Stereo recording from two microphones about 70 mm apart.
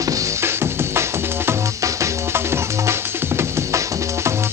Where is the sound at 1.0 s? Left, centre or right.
Right.